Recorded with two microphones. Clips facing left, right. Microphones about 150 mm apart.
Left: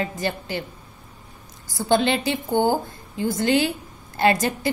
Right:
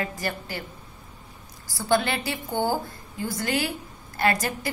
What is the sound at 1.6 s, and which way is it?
A woman's voice, 20° left (ahead or behind).